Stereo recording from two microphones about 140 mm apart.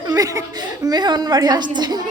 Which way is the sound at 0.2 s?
25° right (ahead or behind).